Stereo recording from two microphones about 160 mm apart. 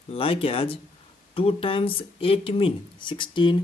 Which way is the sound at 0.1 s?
35° left (ahead or behind).